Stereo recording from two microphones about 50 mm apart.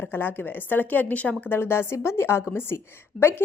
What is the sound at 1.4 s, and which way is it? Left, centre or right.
A woman's voice, left.